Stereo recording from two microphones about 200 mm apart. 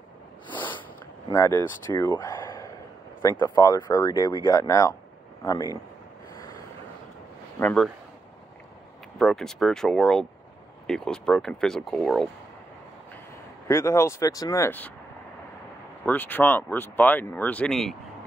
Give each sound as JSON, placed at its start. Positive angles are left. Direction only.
{"t": 0.5, "sound": "a sound", "side_deg": 25}
{"t": 1.3, "sound": "speech", "side_deg": 15}
{"t": 7.6, "sound": "speech", "side_deg": 5}
{"t": 9.2, "sound": "speech", "side_deg": 0}
{"t": 13.7, "sound": "speech", "side_deg": 15}
{"t": 16.1, "sound": "speech", "side_deg": 10}